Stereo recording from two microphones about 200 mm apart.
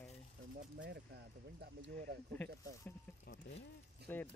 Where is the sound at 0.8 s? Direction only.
55° right (ahead or behind).